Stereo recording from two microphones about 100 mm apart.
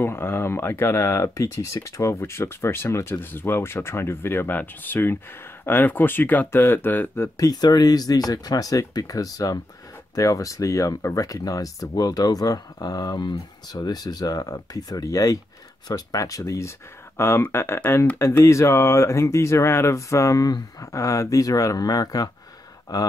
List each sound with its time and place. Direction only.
0.0 s speech: 25° left (ahead or behind)
7.3 s speech: 40° left (ahead or behind)